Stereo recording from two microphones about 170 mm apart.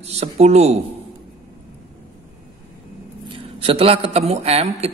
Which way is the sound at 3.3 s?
35° right (ahead or behind).